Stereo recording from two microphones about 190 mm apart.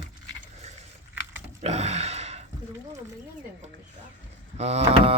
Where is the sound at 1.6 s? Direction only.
35° right (ahead or behind).